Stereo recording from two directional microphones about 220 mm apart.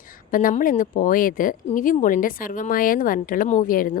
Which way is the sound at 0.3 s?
40° left (ahead or behind).